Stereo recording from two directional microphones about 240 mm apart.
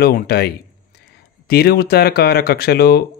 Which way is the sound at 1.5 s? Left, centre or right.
Left.